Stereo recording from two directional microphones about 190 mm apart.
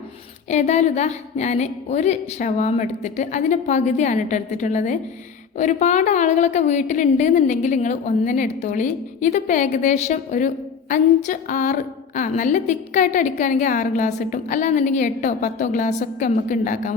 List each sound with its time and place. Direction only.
0.5 s a woman's voice: 35° left (ahead or behind)